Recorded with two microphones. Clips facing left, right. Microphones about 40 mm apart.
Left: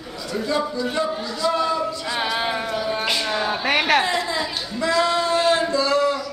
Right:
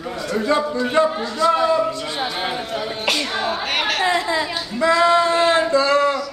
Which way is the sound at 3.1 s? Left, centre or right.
Right.